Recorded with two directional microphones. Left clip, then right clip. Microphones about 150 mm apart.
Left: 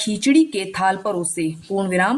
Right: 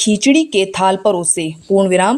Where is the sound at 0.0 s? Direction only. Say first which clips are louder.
Right 4 dB; 45° right (ahead or behind).